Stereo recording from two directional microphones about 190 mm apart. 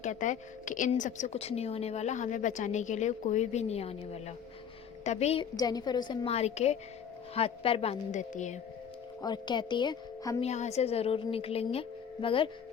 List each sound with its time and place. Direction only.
0.0 s a woman's voice: 40° left (ahead or behind)
5.5 s a woman's voice: 20° left (ahead or behind); by 8.5 s 40° left (ahead or behind)
9.2 s speech: 25° left (ahead or behind)
10.5 s a woman's voice: 35° left (ahead or behind)